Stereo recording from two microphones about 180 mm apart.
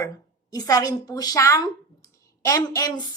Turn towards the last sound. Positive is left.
turn(degrees=20)  # may be behind; listen again after turning